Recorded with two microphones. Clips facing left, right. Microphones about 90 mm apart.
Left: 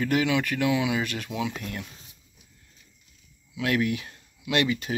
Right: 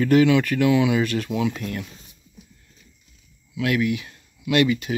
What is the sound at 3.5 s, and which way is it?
Speech, 30° left (ahead or behind).